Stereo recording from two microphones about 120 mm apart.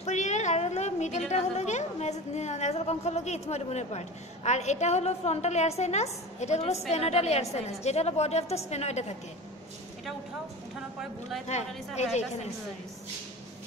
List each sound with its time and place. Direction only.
0.0 s a woman's voice: 75° left (ahead or behind)
11.0 s speech: centre (ahead or behind)
11.4 s a woman's voice: 65° left (ahead or behind)